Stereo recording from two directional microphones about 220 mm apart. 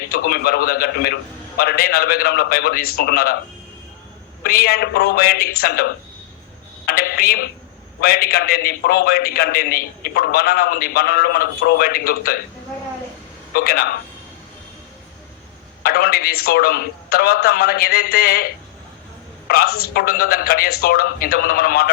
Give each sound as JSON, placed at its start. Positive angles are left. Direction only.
{"t": 0.1, "sound": "a man's voice", "side_deg": 45}
{"t": 4.4, "sound": "a man's voice", "side_deg": 45}
{"t": 13.5, "sound": "a man's voice", "side_deg": 45}
{"t": 15.8, "sound": "a man's voice", "side_deg": 45}
{"t": 19.5, "sound": "a man's voice", "side_deg": 45}